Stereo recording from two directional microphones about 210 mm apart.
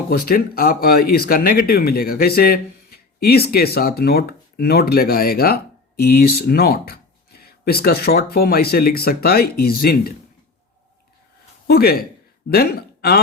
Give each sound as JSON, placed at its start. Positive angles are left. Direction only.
{"t": 0.1, "sound": "speech", "side_deg": 45}
{"t": 11.7, "sound": "speech", "side_deg": 45}